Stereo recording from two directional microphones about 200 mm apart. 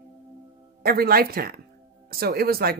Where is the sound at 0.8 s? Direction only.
50° right (ahead or behind).